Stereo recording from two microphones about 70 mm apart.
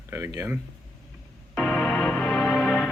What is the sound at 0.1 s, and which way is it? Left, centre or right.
Speech, right.